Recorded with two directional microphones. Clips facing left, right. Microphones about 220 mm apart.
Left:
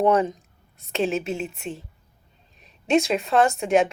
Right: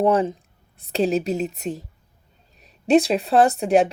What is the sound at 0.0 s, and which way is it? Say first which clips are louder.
Speech: right 1 dB; 30° right (ahead or behind).